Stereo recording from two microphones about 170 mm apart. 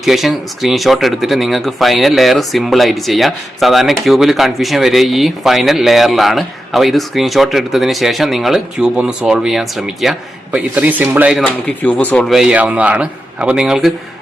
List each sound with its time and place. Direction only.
0.0 s speech: centre (ahead or behind)
11.4 s speech: 10° left (ahead or behind)